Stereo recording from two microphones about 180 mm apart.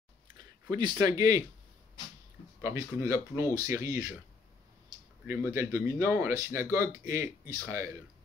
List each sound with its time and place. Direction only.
0.4 s speech: 25° right (ahead or behind)
2.6 s speech: 15° right (ahead or behind)
5.2 s speech: 15° right (ahead or behind)